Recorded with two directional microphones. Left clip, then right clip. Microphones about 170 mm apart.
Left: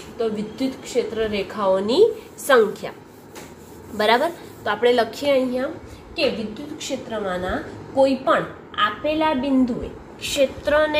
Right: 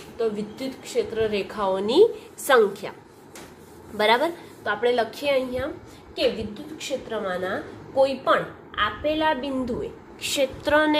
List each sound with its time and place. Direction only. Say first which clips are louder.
0.2 s a woman's voice: left 2 dB; 25° right (ahead or behind)
3.9 s a woman's voice: left 2 dB; 20° right (ahead or behind)
4.6 s a woman's voice: left 4 dB; 5° right (ahead or behind)
5.2 s a woman's voice: left 4 dB; 15° right (ahead or behind)
6.8 s a woman's voice: left 1 dB; 60° right (ahead or behind)